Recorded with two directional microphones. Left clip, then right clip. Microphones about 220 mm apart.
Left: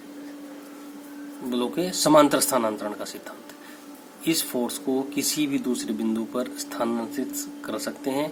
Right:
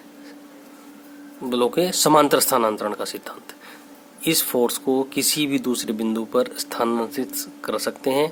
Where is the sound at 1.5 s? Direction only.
45° right (ahead or behind).